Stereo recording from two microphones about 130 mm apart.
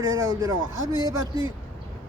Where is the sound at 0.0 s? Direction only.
25° right (ahead or behind).